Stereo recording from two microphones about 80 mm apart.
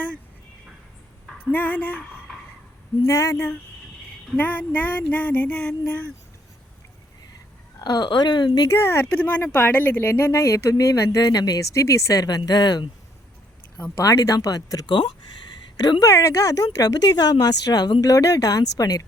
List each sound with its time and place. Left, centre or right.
1.5 s a sound: left
3.1 s speech: left
4.4 s a sound: left
7.8 s speech: left
8.7 s speech: left
11.7 s speech: left
13.9 s speech: left
18.1 s speech: left